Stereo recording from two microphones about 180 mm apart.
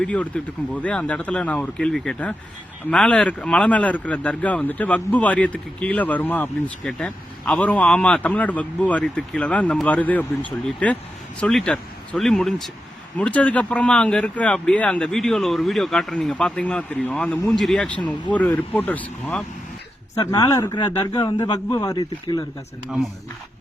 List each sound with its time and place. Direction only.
0.0 s speech: 5° left (ahead or behind)
20.1 s a man's voice: 20° left (ahead or behind)